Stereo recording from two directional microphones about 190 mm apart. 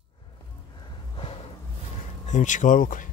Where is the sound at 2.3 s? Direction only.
40° left (ahead or behind).